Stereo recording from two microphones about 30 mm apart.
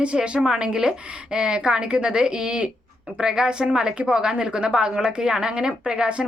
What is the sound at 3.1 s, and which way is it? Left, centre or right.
Speech, right.